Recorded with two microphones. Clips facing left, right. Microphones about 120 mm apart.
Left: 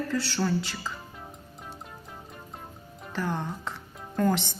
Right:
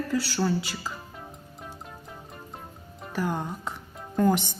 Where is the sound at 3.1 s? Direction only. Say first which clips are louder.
Right 2 dB; 10° right (ahead or behind).